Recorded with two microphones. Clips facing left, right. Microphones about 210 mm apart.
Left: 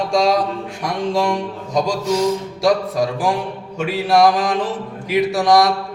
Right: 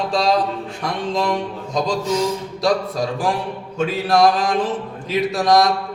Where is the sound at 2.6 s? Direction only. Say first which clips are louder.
Left 3 dB; 15° left (ahead or behind).